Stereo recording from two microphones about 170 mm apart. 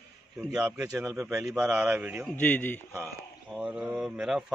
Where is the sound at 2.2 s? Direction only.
10° left (ahead or behind).